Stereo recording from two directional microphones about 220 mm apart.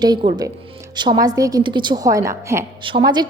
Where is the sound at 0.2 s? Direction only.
20° right (ahead or behind).